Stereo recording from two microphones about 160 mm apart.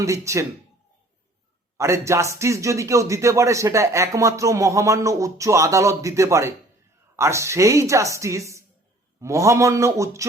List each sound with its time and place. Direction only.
0.0 s speech: 20° right (ahead or behind)
1.8 s speech: 20° right (ahead or behind)